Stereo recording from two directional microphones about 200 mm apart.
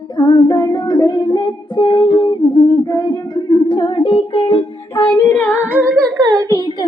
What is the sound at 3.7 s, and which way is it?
Music, 25° left (ahead or behind).